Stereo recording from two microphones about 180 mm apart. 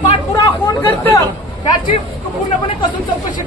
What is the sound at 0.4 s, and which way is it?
Chatter, 15° left (ahead or behind).